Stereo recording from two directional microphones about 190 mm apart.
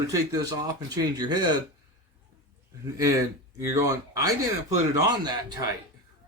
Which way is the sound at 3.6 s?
15° right (ahead or behind).